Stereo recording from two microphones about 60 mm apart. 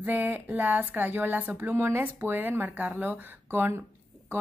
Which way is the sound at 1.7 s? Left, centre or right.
Right.